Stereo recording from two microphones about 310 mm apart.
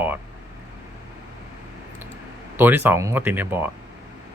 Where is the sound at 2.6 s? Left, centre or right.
Centre.